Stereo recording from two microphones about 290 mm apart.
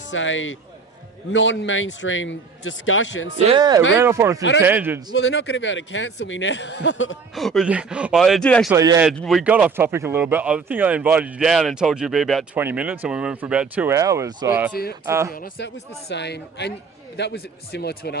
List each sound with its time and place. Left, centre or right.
0.1 s speech: left
3.4 s a man's voice: centre
5.1 s speech: left
7.3 s speech: centre
8.7 s a man's voice: centre
9.0 s a man's voice: centre
15.3 s speech: left